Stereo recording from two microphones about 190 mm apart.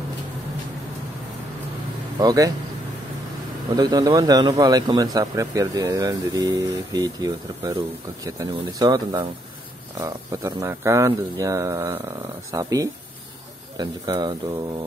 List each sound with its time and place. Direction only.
2.1 s speech: 20° right (ahead or behind)
3.7 s speech: 20° right (ahead or behind)